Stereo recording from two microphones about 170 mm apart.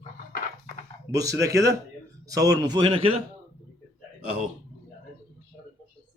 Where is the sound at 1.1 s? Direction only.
20° right (ahead or behind).